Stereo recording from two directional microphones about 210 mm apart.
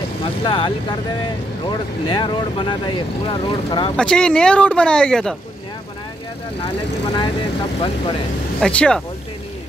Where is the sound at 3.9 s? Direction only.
5° left (ahead or behind).